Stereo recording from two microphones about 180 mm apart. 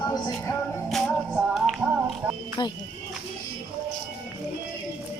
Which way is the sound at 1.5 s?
Centre (ahead or behind).